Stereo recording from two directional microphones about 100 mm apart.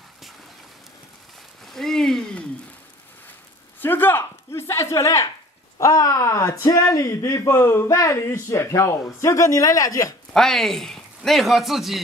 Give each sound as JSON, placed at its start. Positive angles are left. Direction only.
{"t": 1.7, "sound": "a sound", "side_deg": 5}
{"t": 3.8, "sound": "speech", "side_deg": 20}
{"t": 10.3, "sound": "a man's voice", "side_deg": 5}